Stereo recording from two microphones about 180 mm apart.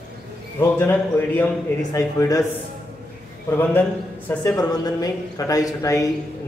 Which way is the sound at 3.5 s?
10° left (ahead or behind).